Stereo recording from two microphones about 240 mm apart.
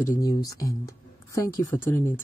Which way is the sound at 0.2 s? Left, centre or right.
Centre.